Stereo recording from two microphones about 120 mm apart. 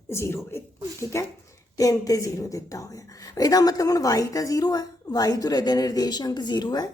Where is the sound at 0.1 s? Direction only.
20° left (ahead or behind).